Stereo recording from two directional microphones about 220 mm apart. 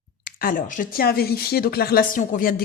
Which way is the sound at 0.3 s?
40° left (ahead or behind).